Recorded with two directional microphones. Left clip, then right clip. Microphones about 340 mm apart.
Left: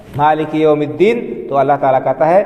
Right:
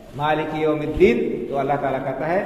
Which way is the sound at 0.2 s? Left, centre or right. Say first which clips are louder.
Left 9 dB; left.